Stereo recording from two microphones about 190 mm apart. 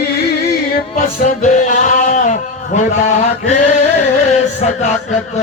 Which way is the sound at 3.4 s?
40° left (ahead or behind).